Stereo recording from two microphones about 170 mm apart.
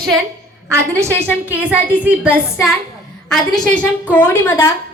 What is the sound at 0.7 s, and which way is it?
A woman's voice, 15° right (ahead or behind).